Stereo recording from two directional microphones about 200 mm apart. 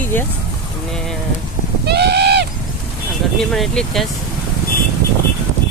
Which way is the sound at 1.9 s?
55° right (ahead or behind).